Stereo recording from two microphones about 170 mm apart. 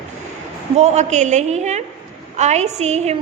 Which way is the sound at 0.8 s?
40° right (ahead or behind).